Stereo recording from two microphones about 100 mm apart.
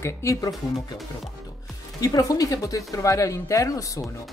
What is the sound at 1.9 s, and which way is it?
A woman's voice, 35° left (ahead or behind).